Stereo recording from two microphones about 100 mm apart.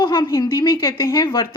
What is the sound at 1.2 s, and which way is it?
Speech, 35° left (ahead or behind).